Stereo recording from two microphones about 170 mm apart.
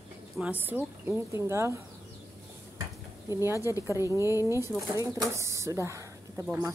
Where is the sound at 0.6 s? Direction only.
10° right (ahead or behind).